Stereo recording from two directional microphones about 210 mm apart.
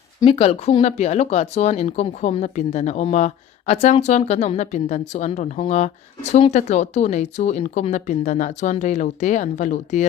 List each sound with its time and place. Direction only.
0.2 s speech: 25° left (ahead or behind)